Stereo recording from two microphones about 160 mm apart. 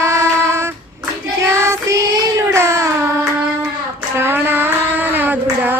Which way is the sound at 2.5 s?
15° right (ahead or behind).